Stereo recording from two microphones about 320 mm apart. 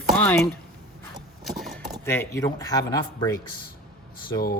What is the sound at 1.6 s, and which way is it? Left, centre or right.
Speech, centre.